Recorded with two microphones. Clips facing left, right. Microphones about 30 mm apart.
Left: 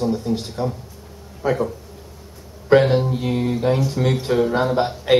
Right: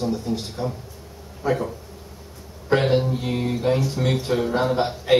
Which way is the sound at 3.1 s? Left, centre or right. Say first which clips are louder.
Left 3 dB; centre.